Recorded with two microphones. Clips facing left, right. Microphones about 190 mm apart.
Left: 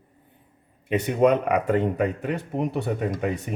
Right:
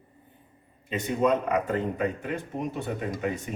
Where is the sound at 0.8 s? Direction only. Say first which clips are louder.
Left 5 dB; 65° left (ahead or behind).